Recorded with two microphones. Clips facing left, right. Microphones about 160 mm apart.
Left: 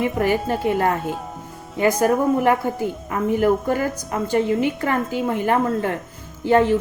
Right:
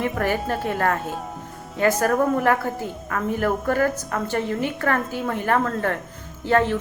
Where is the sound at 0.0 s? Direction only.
15° left (ahead or behind).